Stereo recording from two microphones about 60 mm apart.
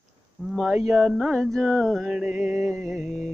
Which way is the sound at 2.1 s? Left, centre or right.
Centre.